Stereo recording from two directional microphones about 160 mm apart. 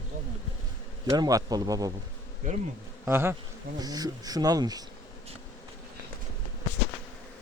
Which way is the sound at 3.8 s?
25° right (ahead or behind).